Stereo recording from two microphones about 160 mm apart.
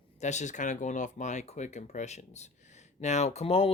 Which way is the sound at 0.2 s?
45° left (ahead or behind).